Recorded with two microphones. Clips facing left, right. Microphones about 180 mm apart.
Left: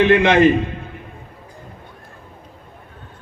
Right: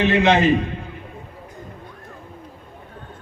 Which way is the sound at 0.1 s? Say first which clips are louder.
Left 3 dB; 55° left (ahead or behind).